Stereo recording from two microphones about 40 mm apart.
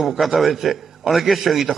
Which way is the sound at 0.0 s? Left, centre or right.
Centre.